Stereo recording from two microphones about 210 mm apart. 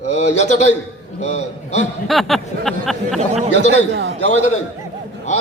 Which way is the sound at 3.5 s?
55° right (ahead or behind).